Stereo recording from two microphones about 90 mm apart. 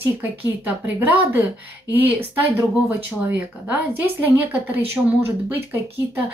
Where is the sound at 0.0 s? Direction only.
20° right (ahead or behind).